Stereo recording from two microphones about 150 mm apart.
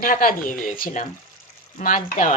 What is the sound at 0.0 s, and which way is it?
Speech, 70° left (ahead or behind).